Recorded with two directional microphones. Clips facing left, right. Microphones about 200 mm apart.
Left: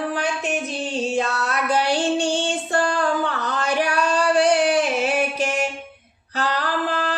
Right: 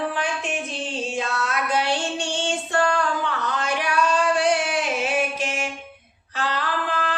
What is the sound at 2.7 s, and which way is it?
Singing, 35° left (ahead or behind).